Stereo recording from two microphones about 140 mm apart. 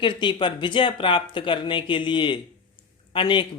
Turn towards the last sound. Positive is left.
turn(degrees=35)  # may be behind; listen again after turning